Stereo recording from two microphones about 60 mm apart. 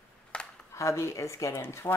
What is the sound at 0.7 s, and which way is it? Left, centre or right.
Speech, left.